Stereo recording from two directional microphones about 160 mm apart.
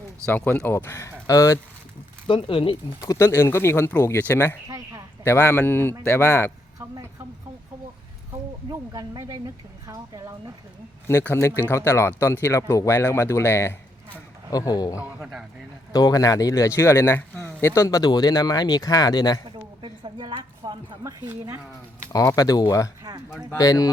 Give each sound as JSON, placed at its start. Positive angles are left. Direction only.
{"t": 0.3, "sound": "speech", "side_deg": 10}
{"t": 2.2, "sound": "speech", "side_deg": 35}
{"t": 3.0, "sound": "speech", "side_deg": 20}
{"t": 4.7, "sound": "a sound", "side_deg": -20}
{"t": 5.2, "sound": "speech", "side_deg": 15}
{"t": 6.7, "sound": "a sound", "side_deg": -20}
{"t": 8.7, "sound": "speech", "side_deg": -25}
{"t": 11.1, "sound": "speech", "side_deg": 15}
{"t": 15.2, "sound": "speech", "side_deg": 0}
{"t": 15.9, "sound": "speech", "side_deg": 25}
{"t": 19.5, "sound": "a sound", "side_deg": -30}
{"t": 22.1, "sound": "speech", "side_deg": 25}